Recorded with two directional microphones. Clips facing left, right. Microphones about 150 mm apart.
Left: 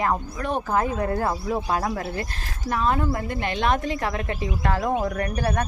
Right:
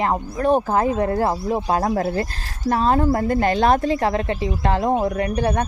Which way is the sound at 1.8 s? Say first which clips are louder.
Right 7 dB; 40° right (ahead or behind).